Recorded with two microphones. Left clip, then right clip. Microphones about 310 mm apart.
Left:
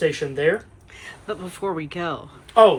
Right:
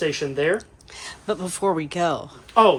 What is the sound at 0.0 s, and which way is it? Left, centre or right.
Speech, right.